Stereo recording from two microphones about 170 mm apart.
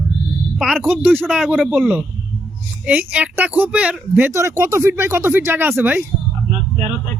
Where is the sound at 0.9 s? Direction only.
10° right (ahead or behind).